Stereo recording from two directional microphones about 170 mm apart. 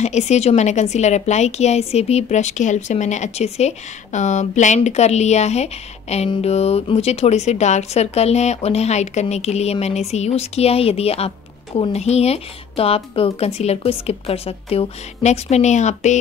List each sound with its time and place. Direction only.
0.0 s a woman's voice: 40° left (ahead or behind)